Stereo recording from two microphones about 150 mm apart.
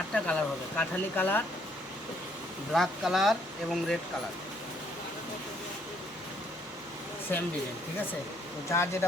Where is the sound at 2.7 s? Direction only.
Centre (ahead or behind).